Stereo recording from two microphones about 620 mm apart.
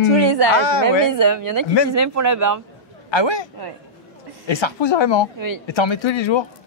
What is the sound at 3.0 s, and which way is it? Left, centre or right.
Speech, left.